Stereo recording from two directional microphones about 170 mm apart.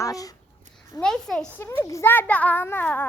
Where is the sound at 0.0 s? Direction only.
20° left (ahead or behind).